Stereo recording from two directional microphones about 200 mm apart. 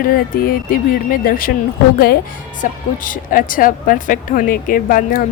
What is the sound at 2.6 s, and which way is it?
A woman's voice, 40° left (ahead or behind).